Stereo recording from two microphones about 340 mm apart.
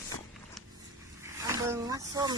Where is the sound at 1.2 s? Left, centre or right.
Centre.